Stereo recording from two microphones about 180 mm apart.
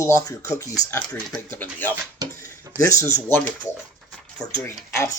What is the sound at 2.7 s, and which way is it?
Speech, 15° left (ahead or behind).